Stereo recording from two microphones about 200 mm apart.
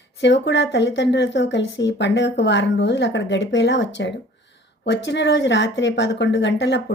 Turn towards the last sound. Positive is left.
turn(degrees=60)  # may be behind; listen again after turning